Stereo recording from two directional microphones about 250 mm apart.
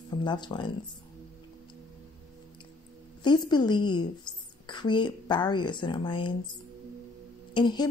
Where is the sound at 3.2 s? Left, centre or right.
Centre.